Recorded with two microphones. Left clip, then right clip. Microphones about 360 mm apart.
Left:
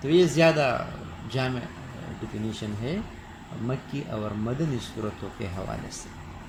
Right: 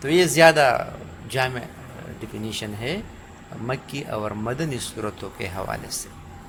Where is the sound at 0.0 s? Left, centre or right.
Right.